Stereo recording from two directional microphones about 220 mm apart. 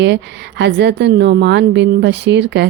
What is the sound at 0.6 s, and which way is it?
Speech, 50° right (ahead or behind).